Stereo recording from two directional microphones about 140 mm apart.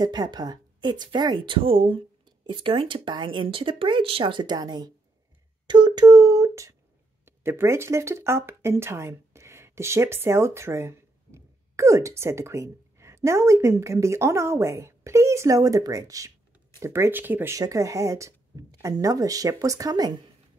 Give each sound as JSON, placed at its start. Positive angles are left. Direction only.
{"t": 0.0, "sound": "speech", "side_deg": -30}
{"t": 5.7, "sound": "a sound", "side_deg": -35}
{"t": 7.2, "sound": "speech", "side_deg": -15}